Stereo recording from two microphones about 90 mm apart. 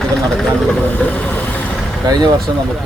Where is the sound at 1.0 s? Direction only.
15° left (ahead or behind).